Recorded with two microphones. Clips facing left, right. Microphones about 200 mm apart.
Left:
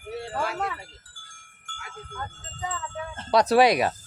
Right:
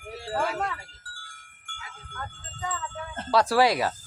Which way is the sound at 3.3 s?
20° left (ahead or behind).